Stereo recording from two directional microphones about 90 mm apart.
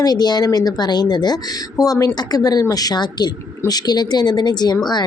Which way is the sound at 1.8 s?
40° left (ahead or behind).